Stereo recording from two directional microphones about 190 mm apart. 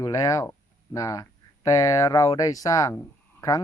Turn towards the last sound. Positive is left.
turn(degrees=20)  # may be behind; listen again after turning